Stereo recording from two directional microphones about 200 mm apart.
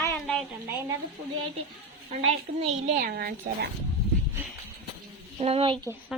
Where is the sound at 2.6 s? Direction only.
35° right (ahead or behind); by 3.7 s 50° right (ahead or behind).